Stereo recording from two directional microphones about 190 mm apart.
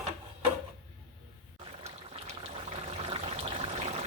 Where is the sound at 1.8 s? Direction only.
30° right (ahead or behind).